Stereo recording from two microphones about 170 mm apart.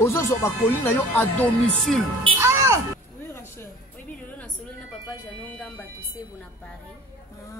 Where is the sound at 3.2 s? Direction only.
15° left (ahead or behind).